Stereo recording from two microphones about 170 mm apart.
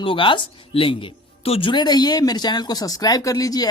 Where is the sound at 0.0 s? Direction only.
30° left (ahead or behind).